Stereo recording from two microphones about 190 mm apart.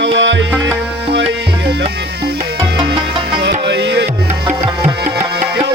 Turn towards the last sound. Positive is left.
turn(degrees=-65)  # may be behind; listen again after turning